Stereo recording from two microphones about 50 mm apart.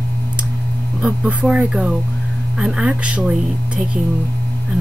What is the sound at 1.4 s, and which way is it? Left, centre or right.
Speech, centre.